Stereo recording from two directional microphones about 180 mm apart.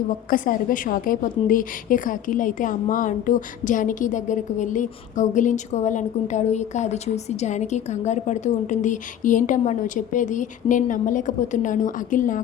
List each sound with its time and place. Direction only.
0.3 s a woman's voice: 50° left (ahead or behind)